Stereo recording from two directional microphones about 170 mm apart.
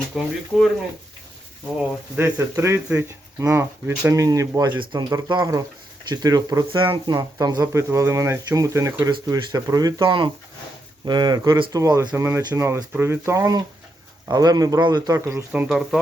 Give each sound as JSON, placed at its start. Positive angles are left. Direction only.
{"t": 0.1, "sound": "speech", "side_deg": 0}
{"t": 2.1, "sound": "speech", "side_deg": -15}